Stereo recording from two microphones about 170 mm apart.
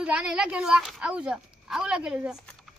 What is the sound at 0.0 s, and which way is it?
Speech, 5° right (ahead or behind).